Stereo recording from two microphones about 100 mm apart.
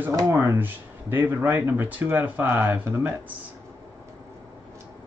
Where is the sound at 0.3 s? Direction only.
25° right (ahead or behind).